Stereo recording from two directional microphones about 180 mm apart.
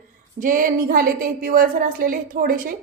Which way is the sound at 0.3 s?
50° right (ahead or behind).